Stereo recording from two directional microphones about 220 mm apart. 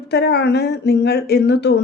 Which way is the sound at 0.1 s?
50° left (ahead or behind).